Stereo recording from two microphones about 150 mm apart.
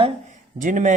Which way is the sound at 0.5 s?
60° right (ahead or behind).